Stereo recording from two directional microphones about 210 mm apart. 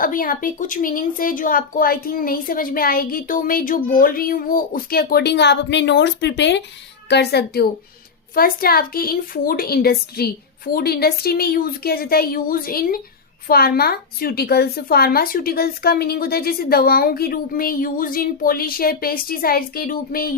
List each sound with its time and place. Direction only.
0.0 s a woman's voice: 40° left (ahead or behind)